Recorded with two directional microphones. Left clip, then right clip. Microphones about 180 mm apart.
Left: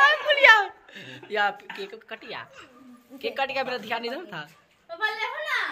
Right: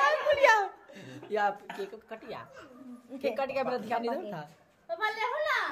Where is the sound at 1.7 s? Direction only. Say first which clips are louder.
Left 3 dB; centre (ahead or behind).